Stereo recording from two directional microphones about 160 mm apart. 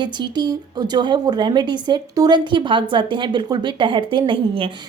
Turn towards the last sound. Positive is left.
turn(degrees=-30)  # may be behind; listen again after turning